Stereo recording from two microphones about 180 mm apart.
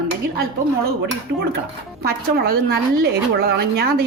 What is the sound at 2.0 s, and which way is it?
A woman's voice, 60° right (ahead or behind).